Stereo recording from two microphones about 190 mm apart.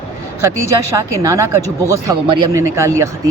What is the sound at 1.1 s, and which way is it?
Speech, 15° right (ahead or behind).